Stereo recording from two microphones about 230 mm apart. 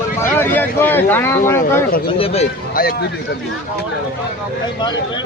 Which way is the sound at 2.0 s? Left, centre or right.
Left.